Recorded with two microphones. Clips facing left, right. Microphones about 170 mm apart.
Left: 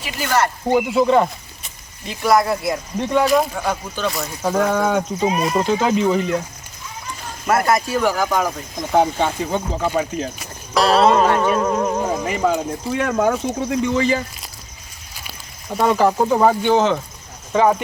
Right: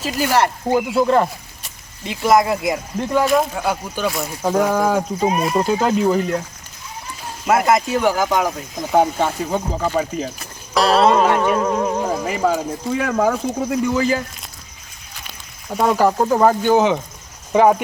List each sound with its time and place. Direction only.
0.7 s speech: centre (ahead or behind)
2.0 s speech: 20° right (ahead or behind)
3.0 s speech: centre (ahead or behind)
7.4 s speech: 15° right (ahead or behind); by 14.5 s centre (ahead or behind)
15.7 s speech: centre (ahead or behind)